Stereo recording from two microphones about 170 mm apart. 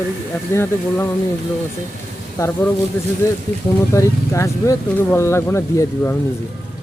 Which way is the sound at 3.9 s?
15° left (ahead or behind).